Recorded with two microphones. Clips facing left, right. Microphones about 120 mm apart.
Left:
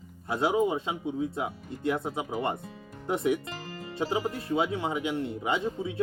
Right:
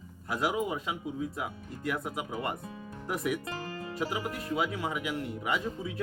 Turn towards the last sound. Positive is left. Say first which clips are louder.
# left 3 dB
turn(degrees=25)  # may be behind; listen again after turning